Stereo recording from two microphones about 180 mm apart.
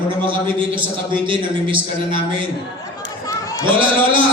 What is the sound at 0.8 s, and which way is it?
A man's voice, 25° right (ahead or behind).